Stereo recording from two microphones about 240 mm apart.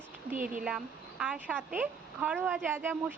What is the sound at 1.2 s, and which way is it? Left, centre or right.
A woman's voice, centre.